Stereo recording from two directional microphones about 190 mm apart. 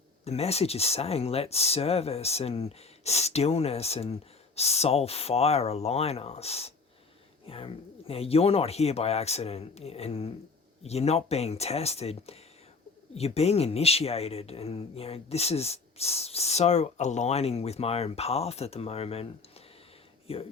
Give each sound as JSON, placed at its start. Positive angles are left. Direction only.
{"t": 0.3, "sound": "speech", "side_deg": 35}